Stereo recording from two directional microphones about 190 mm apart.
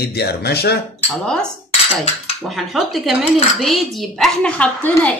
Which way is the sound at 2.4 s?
Centre (ahead or behind).